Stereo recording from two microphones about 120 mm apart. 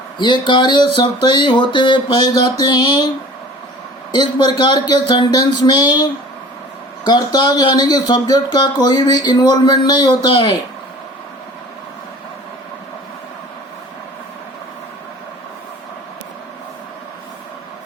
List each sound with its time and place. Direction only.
0.2 s speech: 40° left (ahead or behind)
4.1 s speech: 40° left (ahead or behind)